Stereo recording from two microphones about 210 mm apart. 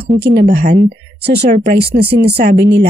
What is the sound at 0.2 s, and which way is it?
Speech, 50° right (ahead or behind).